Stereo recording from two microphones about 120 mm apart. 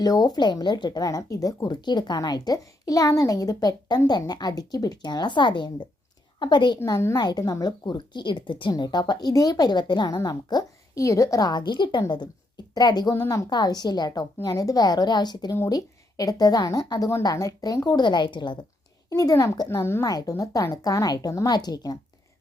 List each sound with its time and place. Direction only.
0.0 s speech: 35° left (ahead or behind)
6.7 s speech: 25° left (ahead or behind); by 18.5 s 40° left (ahead or behind)
19.1 s speech: 30° left (ahead or behind)
20.1 s speech: 30° left (ahead or behind)